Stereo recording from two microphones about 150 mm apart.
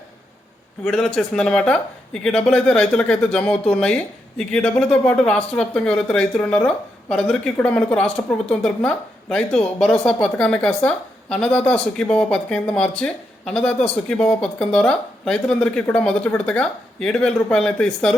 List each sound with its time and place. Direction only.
0.9 s a woman's voice: 5° left (ahead or behind)